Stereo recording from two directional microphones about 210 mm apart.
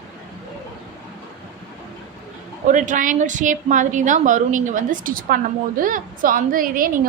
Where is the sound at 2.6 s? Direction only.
35° right (ahead or behind).